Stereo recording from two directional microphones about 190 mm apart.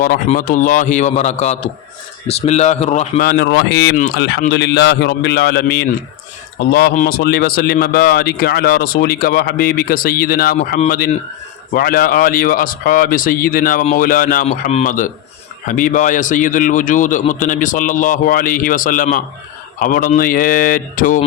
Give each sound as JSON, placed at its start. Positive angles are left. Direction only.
{"t": 0.3, "sound": "a man's voice", "side_deg": 40}
{"t": 3.2, "sound": "a man's voice", "side_deg": 55}